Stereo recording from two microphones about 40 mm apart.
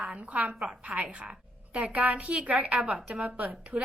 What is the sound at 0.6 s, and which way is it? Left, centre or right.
A woman's voice, right.